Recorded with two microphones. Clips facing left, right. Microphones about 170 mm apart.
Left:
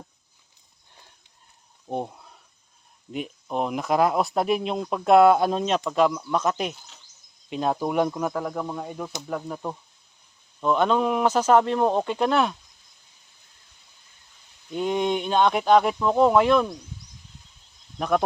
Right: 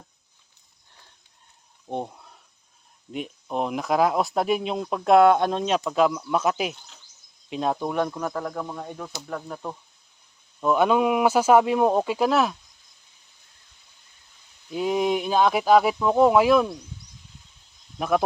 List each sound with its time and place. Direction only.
1.9 s a sound: centre (ahead or behind)
3.1 s speech: centre (ahead or behind)
10.6 s speech: 5° right (ahead or behind)
14.7 s speech: 5° right (ahead or behind)
18.0 s speech: 5° right (ahead or behind)